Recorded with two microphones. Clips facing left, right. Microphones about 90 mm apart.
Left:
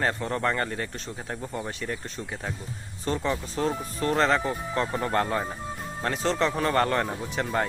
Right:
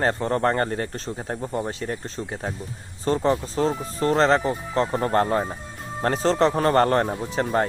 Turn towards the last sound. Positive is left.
turn(degrees=-35)  # may be behind; listen again after turning